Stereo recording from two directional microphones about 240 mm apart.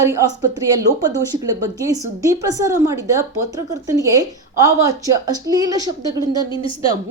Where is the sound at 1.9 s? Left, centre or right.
Centre.